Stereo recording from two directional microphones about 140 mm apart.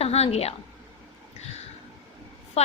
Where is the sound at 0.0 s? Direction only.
45° left (ahead or behind).